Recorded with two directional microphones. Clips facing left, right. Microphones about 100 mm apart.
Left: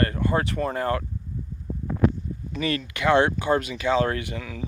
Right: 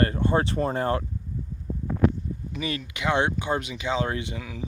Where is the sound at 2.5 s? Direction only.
15° right (ahead or behind).